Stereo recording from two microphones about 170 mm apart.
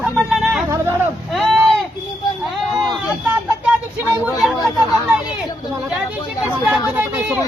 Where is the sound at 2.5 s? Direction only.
Centre (ahead or behind).